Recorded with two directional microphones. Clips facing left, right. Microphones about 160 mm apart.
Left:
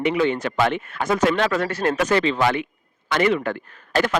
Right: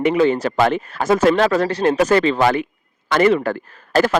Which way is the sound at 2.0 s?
45° right (ahead or behind).